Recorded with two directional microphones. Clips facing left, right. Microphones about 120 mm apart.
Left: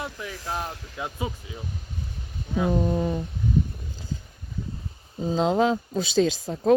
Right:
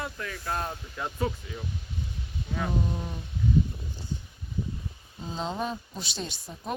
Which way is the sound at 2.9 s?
90° left.